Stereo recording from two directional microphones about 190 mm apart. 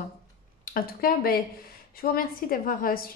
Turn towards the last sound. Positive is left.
turn(degrees=50)  # may be behind; listen again after turning